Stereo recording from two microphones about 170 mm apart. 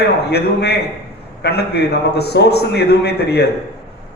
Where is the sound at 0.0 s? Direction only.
75° left (ahead or behind).